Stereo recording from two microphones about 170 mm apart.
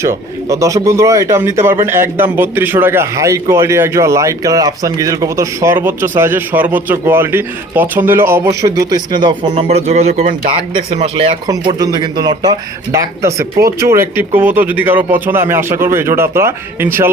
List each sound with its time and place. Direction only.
0.0 s a man's voice: 15° right (ahead or behind); by 10.3 s 40° right (ahead or behind)
10.9 s a man's voice: 25° right (ahead or behind)